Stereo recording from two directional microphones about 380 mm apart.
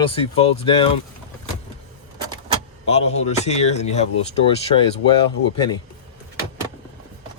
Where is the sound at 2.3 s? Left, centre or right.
Centre.